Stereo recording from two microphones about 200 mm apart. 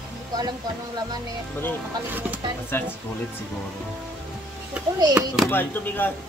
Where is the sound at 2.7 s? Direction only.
10° left (ahead or behind).